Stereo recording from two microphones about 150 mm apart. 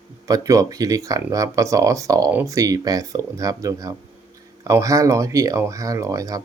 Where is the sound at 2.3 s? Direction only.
10° right (ahead or behind).